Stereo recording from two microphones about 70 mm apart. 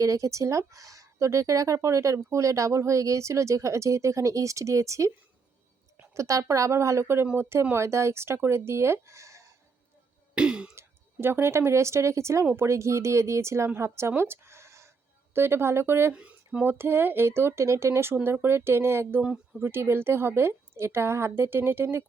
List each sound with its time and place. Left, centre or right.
0.0 s speech: right
6.1 s speech: right
10.3 s throat clearing: centre
10.8 s speech: right
16.1 s speech: centre
16.6 s speech: right